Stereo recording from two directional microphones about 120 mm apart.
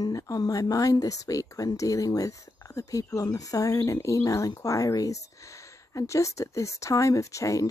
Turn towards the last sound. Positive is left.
turn(degrees=25)  # may be behind; listen again after turning